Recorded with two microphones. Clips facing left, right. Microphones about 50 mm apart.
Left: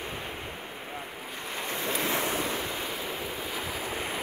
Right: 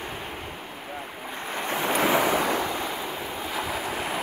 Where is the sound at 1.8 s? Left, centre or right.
Right.